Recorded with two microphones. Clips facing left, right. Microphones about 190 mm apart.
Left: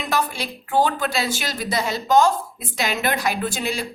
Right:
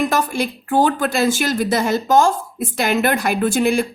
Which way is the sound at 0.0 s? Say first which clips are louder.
Right 6 dB; 50° right (ahead or behind).